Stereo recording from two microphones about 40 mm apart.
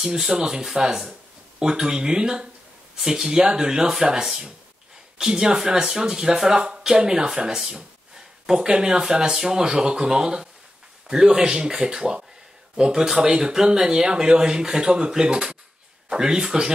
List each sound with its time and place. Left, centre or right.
0.0 s speech: centre